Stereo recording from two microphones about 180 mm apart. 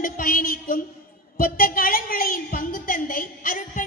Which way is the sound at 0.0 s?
50° left (ahead or behind).